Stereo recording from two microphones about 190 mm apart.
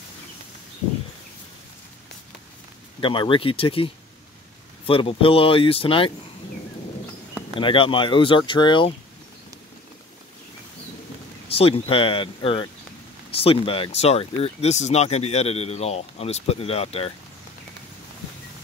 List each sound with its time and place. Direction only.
3.0 s speech: 25° left (ahead or behind)
7.5 s speech: 25° left (ahead or behind)
11.4 s speech: 30° left (ahead or behind)